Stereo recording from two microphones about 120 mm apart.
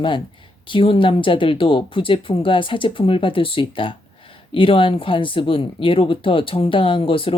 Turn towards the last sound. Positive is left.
turn(degrees=50)  # may be behind; listen again after turning